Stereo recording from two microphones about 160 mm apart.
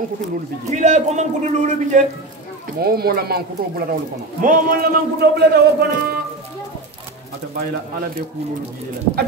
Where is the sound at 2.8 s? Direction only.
70° right (ahead or behind).